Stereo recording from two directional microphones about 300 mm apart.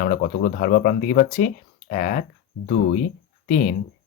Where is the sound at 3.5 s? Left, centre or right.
Left.